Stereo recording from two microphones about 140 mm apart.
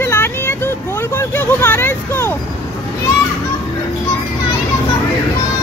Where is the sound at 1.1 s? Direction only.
15° left (ahead or behind).